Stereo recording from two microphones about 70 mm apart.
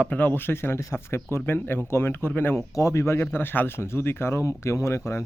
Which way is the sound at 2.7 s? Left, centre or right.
Left.